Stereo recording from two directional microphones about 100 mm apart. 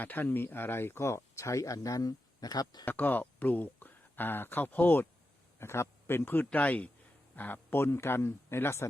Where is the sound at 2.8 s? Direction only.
20° left (ahead or behind).